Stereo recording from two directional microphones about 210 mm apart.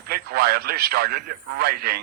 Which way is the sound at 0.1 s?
45° right (ahead or behind).